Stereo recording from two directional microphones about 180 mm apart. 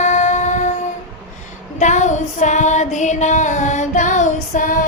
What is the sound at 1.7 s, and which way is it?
Female singing, 40° left (ahead or behind).